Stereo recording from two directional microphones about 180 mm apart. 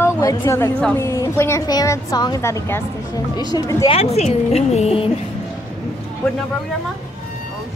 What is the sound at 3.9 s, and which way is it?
A woman's voice, 35° left (ahead or behind).